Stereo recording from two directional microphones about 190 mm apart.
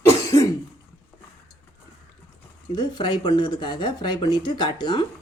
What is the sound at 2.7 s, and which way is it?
Speech, 25° left (ahead or behind).